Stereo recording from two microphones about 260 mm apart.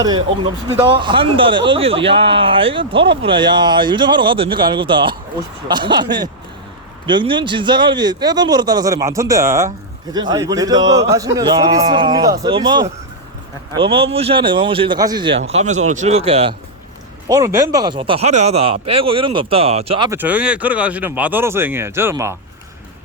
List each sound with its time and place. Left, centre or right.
0.0 s a man's voice: centre
20.1 s a man's voice: centre